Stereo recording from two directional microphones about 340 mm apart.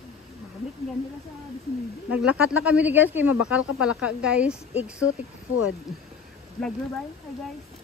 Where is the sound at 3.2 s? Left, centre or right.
Left.